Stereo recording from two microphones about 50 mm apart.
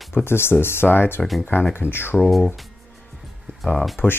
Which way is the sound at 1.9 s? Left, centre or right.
Left.